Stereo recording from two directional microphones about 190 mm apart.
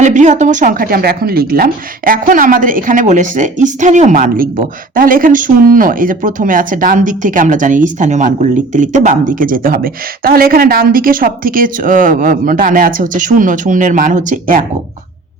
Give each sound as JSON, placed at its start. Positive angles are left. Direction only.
{"t": 0.0, "sound": "a woman's voice", "side_deg": -40}